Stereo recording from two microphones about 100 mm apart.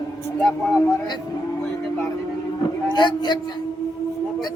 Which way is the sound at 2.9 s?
45° left (ahead or behind).